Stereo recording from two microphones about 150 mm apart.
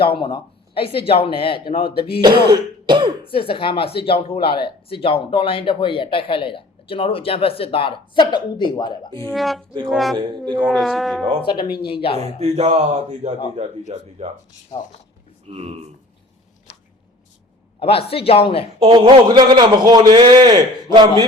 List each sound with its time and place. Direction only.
0.0 s speech: 35° left (ahead or behind)
1.8 s speech: 90° left
2.2 s throat clearing: 30° right (ahead or behind)
3.3 s speech: 35° left (ahead or behind)
9.3 s speech: centre (ahead or behind)
10.2 s speech: 30° right (ahead or behind)
10.6 s speech: centre (ahead or behind)
11.4 s speech: 35° left (ahead or behind)
12.1 s a man's voice: 45° right (ahead or behind)
15.4 s a man's voice: 45° right (ahead or behind)
17.7 s speech: 40° left (ahead or behind)
18.9 s a man's voice: 30° right (ahead or behind)